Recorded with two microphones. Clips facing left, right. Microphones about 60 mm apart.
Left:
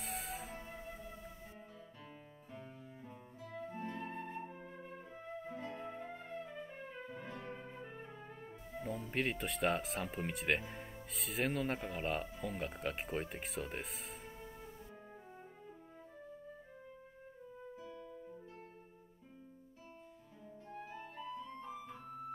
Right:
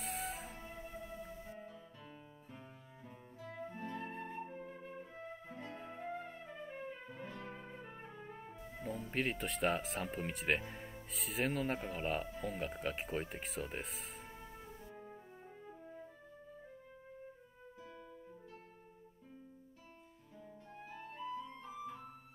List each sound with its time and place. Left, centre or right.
0.0 s music: centre
3.4 s music: centre
3.8 s flute: centre
5.5 s music: centre
5.9 s music: centre
9.0 s speech: centre
17.7 s music: right